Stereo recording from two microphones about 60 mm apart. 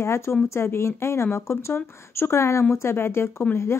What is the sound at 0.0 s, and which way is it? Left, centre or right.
Speech, left.